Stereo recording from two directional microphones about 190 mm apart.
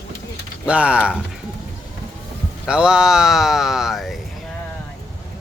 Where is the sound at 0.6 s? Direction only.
5° right (ahead or behind).